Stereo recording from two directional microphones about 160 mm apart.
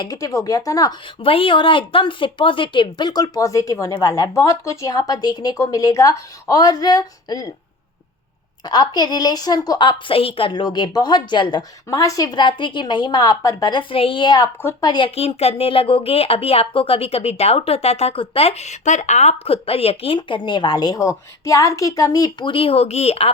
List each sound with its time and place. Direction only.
0.0 s speech: 25° left (ahead or behind)
8.6 s a woman's voice: 25° left (ahead or behind)